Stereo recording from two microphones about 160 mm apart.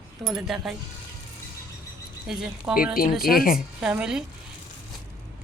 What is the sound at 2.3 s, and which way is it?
Speech, 5° right (ahead or behind).